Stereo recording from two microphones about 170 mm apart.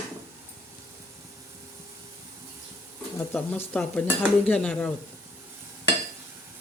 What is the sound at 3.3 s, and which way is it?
Speech, 10° left (ahead or behind).